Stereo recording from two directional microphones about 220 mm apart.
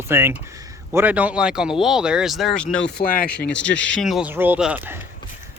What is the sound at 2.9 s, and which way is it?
Speech, 40° left (ahead or behind).